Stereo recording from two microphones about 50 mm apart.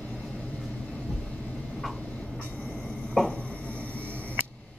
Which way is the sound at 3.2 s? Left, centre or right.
Centre.